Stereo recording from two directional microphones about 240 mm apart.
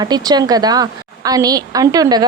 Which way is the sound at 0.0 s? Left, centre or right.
Centre.